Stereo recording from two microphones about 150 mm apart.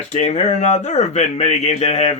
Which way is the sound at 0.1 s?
50° left (ahead or behind).